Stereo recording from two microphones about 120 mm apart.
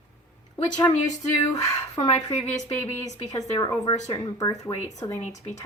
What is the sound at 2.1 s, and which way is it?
Speech, 75° left (ahead or behind).